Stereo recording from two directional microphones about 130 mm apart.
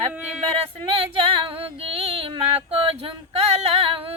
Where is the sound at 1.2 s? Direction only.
45° right (ahead or behind).